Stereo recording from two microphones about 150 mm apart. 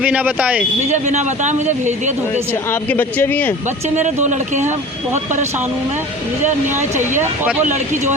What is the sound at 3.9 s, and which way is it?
Speech, 50° right (ahead or behind).